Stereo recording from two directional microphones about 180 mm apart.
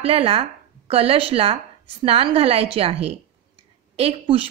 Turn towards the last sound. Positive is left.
turn(degrees=-30)  # may be behind; listen again after turning